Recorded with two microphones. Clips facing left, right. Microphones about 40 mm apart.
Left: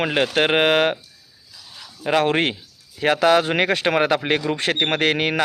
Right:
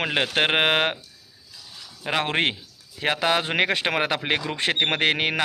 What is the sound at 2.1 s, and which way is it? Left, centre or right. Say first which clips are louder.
A man's voice: left 5 dB; centre.